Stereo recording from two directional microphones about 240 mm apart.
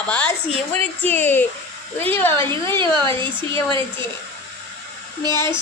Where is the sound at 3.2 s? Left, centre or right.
Centre.